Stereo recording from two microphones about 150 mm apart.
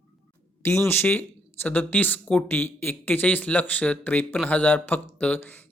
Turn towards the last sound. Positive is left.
turn(degrees=10)  # may be behind; listen again after turning